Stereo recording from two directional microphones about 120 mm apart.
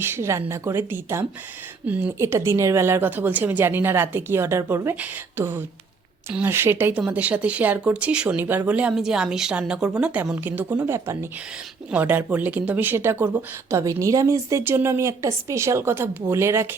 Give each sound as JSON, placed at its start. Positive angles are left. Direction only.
{"t": 0.0, "sound": "speech", "side_deg": -20}